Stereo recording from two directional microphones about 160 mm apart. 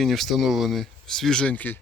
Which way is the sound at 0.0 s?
Centre (ahead or behind).